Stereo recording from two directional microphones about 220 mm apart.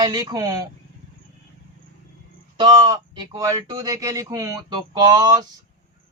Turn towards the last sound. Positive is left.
turn(degrees=-20)  # may be behind; listen again after turning